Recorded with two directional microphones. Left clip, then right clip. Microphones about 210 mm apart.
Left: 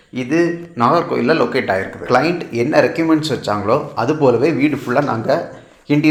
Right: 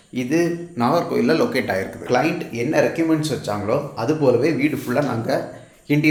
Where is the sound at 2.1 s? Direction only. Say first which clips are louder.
Left 5 dB; 25° left (ahead or behind).